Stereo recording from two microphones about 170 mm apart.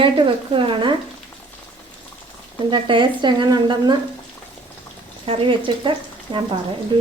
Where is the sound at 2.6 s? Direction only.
30° right (ahead or behind).